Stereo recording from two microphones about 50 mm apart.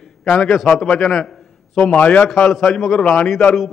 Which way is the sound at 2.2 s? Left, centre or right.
Left.